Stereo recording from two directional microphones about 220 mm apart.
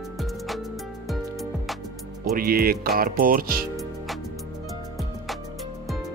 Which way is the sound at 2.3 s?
40° right (ahead or behind).